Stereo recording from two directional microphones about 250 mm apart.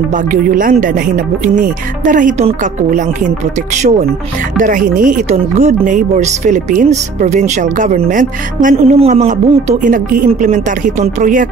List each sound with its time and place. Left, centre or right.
0.1 s speech: right